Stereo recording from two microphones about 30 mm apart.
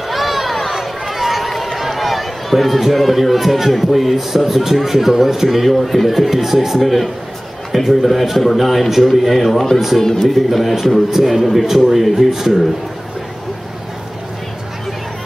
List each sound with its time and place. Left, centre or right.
0.1 s a sound: centre
1.8 s speech: centre
6.8 s speech: centre
9.3 s speech: centre
10.3 s speech: centre